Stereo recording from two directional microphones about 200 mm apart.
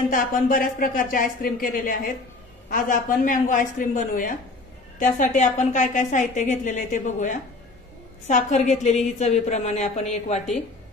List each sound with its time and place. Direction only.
0.1 s a woman's voice: 45° left (ahead or behind)